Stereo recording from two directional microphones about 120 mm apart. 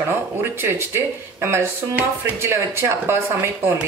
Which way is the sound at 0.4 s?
20° right (ahead or behind).